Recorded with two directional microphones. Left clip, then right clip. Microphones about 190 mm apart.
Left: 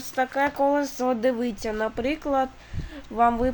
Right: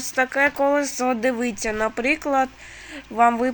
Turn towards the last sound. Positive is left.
turn(degrees=-10)  # may be behind; listen again after turning